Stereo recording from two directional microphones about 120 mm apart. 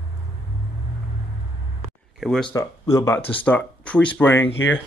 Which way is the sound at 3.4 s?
10° left (ahead or behind).